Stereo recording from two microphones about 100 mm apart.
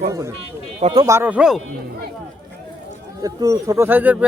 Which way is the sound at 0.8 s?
65° right (ahead or behind).